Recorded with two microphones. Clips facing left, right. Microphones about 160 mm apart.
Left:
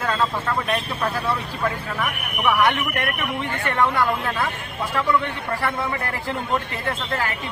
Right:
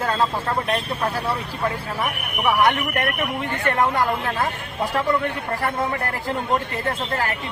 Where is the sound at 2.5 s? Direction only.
40° right (ahead or behind).